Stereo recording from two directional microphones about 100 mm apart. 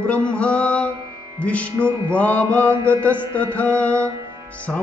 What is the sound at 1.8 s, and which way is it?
Music, 25° right (ahead or behind).